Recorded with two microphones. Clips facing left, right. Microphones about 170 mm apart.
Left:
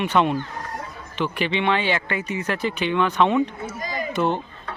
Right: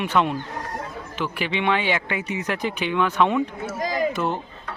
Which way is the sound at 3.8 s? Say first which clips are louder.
Right 6 dB; 90° right.